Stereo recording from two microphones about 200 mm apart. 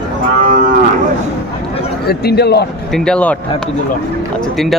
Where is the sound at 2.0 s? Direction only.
55° left (ahead or behind).